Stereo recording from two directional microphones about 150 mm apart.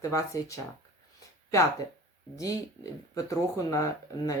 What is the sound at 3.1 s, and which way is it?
Speech, 20° left (ahead or behind).